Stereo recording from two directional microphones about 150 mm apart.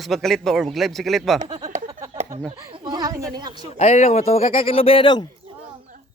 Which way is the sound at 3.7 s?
45° left (ahead or behind).